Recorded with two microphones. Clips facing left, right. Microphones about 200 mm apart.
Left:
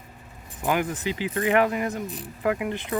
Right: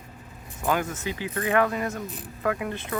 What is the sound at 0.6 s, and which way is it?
Speech, 15° left (ahead or behind).